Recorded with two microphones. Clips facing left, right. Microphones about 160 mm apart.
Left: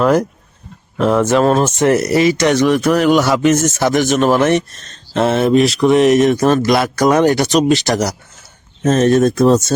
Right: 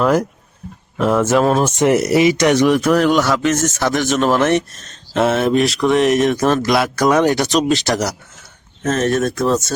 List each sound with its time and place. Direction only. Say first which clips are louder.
0.0 s speech: left 2 dB; 5° right (ahead or behind)
1.8 s speech: right 1 dB; 15° right (ahead or behind)
2.6 s speech: even; 5° right (ahead or behind)
8.8 s speech: left 5 dB; 20° left (ahead or behind)